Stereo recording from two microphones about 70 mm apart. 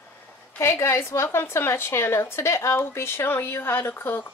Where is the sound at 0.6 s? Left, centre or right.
Left.